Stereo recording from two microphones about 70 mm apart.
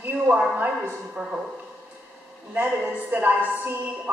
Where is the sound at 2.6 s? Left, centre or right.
Right.